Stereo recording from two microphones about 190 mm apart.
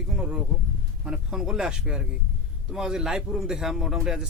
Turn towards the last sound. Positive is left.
turn(degrees=-5)  # may be behind; listen again after turning